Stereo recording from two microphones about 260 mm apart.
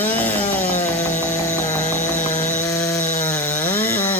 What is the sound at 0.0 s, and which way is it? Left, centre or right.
Chainsaw, centre.